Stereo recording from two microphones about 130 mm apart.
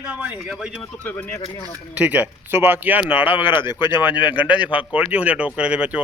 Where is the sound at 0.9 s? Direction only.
15° left (ahead or behind).